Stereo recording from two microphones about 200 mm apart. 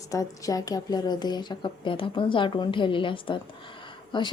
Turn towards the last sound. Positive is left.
turn(degrees=25)  # may be behind; listen again after turning